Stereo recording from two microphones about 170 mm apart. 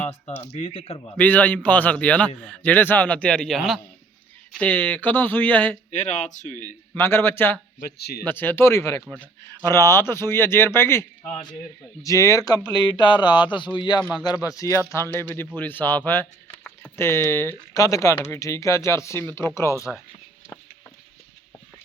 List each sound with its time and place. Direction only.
0.5 s speech: 35° left (ahead or behind)
1.1 s speech: 10° left (ahead or behind)
5.9 s speech: 45° left (ahead or behind)
6.9 s speech: 15° left (ahead or behind)
7.8 s speech: 70° left (ahead or behind)
8.2 s speech: 10° left (ahead or behind)